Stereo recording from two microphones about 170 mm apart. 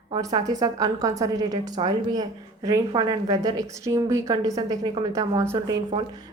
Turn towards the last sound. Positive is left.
turn(degrees=-15)  # may be behind; listen again after turning